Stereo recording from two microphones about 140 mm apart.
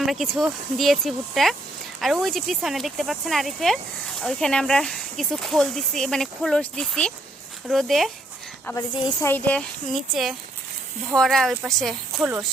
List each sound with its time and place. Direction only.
0.0 s speech: centre (ahead or behind)
8.7 s speech: 20° left (ahead or behind)
9.9 s speech: centre (ahead or behind)